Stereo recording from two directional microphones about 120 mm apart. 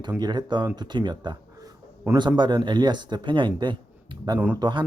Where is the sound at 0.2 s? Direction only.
35° right (ahead or behind).